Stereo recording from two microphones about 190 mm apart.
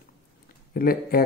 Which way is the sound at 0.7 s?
50° left (ahead or behind).